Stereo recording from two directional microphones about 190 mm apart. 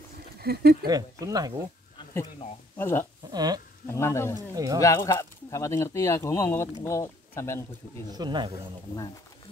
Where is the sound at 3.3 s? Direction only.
20° right (ahead or behind).